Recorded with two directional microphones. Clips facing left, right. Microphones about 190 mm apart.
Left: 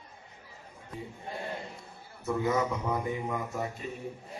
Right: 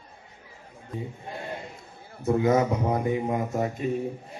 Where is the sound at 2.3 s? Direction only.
45° right (ahead or behind).